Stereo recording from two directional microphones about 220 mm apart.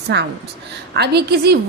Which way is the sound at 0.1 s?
50° right (ahead or behind).